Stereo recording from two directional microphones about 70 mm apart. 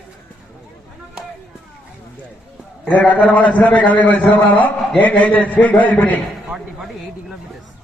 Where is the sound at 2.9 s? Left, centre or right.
Left.